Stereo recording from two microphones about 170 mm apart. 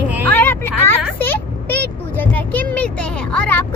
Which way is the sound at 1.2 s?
10° left (ahead or behind).